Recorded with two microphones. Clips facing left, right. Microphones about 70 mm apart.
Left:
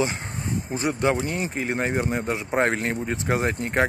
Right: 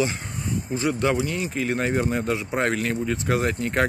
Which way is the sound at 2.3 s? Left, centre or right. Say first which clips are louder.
Left 1 dB; left.